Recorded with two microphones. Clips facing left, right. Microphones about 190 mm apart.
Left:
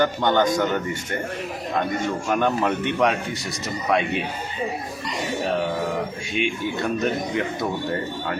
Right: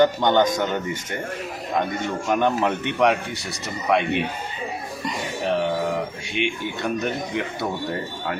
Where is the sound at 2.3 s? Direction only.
15° right (ahead or behind).